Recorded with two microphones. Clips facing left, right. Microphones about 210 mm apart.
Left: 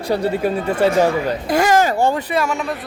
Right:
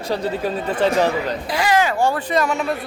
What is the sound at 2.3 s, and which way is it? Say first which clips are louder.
Speech: even; centre (ahead or behind).